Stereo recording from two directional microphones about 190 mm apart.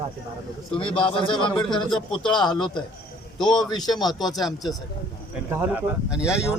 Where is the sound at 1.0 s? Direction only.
25° left (ahead or behind).